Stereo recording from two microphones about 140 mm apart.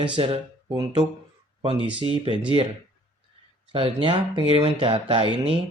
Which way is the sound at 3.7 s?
40° right (ahead or behind).